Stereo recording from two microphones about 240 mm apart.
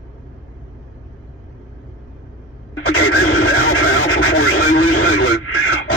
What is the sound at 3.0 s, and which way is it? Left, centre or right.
Radio, left.